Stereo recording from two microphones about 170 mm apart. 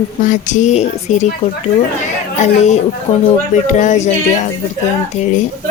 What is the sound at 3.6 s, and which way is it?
Speech, 45° left (ahead or behind).